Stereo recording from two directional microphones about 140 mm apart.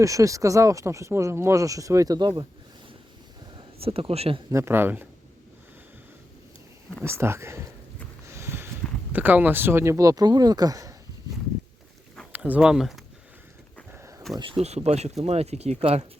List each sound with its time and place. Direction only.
0.0 s speech: 25° right (ahead or behind)
3.8 s speech: 45° right (ahead or behind)
4.5 s speech: 15° right (ahead or behind)
7.0 s speech: 20° right (ahead or behind)
8.3 s a sound: 20° right (ahead or behind)
9.1 s speech: 10° right (ahead or behind)
12.3 s speech: 10° right (ahead or behind)
13.9 s a sound: 20° right (ahead or behind)
14.3 s speech: 40° right (ahead or behind)